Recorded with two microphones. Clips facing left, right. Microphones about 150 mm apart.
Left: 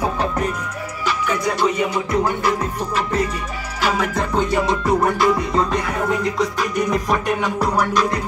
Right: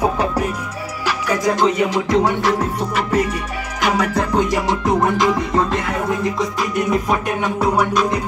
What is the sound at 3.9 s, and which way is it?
Music, 40° right (ahead or behind).